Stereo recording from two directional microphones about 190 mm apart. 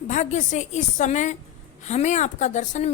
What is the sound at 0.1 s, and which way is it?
A woman's voice, 40° left (ahead or behind).